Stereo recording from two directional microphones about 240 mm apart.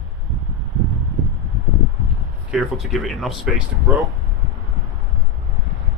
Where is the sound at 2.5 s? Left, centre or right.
Centre.